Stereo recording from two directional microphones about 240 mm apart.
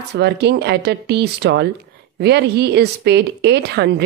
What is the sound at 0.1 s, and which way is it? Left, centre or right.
Speech, right.